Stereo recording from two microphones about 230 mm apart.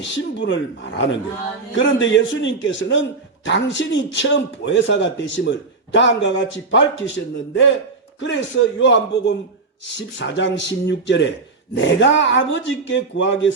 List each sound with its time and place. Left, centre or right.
0.0 s a man's voice: left
8.3 s a man's voice: left